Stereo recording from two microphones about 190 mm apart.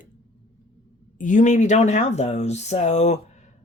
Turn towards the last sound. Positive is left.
turn(degrees=35)  # may be behind; listen again after turning